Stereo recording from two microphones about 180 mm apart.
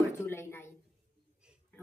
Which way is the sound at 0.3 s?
15° left (ahead or behind).